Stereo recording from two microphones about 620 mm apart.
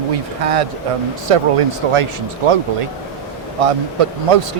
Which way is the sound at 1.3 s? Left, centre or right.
Right.